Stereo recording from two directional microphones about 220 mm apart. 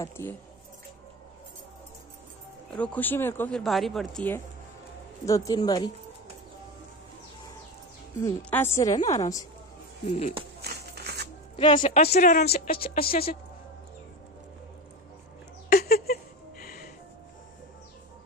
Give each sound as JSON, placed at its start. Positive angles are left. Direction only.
{"t": 0.0, "sound": "speech", "side_deg": 10}
{"t": 2.7, "sound": "speech", "side_deg": 5}
{"t": 8.2, "sound": "speech", "side_deg": 10}
{"t": 10.0, "sound": "speech", "side_deg": 25}
{"t": 10.6, "sound": "a sound", "side_deg": -45}
{"t": 11.5, "sound": "a woman's voice", "side_deg": 20}
{"t": 15.7, "sound": "a sound", "side_deg": 45}